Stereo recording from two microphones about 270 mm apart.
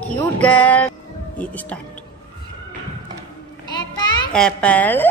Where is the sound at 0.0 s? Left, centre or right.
Centre.